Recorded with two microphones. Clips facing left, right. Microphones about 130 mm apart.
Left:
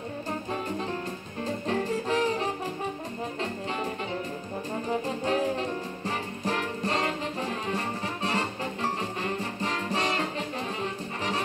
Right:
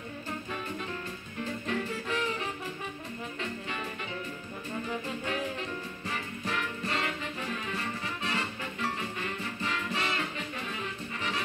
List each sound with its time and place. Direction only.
1.4 s music: 35° left (ahead or behind)
4.8 s music: 35° left (ahead or behind)
10.8 s brass instrument: 35° left (ahead or behind)